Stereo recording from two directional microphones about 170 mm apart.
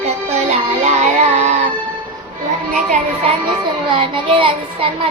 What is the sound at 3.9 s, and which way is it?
Child singing, 30° right (ahead or behind).